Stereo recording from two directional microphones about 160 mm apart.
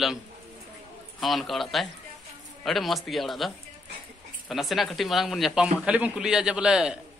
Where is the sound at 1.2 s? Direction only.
Centre (ahead or behind).